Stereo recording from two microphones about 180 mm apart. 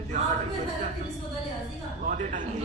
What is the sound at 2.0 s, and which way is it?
Speech, 45° right (ahead or behind).